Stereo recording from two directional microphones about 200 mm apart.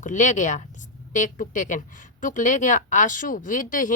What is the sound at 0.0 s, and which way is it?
Speech, 40° left (ahead or behind).